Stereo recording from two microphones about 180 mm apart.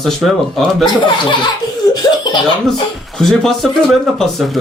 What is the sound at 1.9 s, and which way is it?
Laughter, 20° left (ahead or behind).